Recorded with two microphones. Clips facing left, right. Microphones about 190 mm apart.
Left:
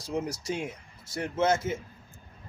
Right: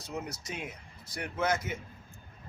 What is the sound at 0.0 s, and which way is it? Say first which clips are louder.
Speech: left 7 dB; 30° left (ahead or behind).